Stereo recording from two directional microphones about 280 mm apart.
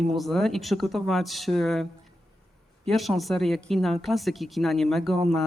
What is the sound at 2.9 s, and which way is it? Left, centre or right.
A man's voice, centre.